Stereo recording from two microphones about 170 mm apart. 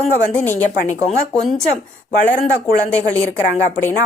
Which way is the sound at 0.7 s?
45° left (ahead or behind).